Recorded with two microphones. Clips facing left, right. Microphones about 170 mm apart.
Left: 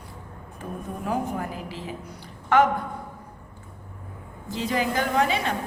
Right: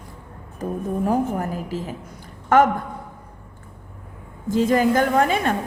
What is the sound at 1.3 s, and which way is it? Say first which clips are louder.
A woman's voice: right 6 dB; 45° right (ahead or behind).